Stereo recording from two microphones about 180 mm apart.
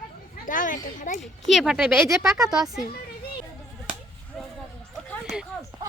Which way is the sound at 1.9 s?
15° right (ahead or behind).